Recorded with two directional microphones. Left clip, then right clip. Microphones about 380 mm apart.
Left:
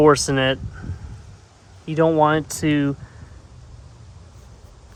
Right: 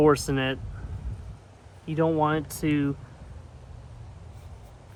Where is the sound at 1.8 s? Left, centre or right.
Left.